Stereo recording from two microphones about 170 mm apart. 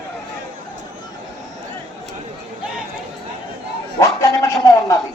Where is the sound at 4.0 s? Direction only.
15° left (ahead or behind).